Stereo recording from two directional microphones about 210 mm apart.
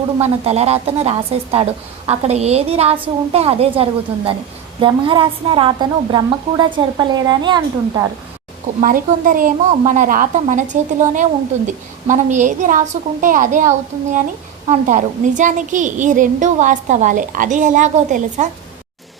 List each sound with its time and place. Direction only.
0.2 s a woman's voice: 30° right (ahead or behind)
8.8 s a woman's voice: 40° right (ahead or behind)